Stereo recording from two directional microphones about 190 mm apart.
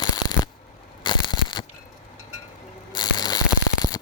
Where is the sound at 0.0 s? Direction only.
20° left (ahead or behind).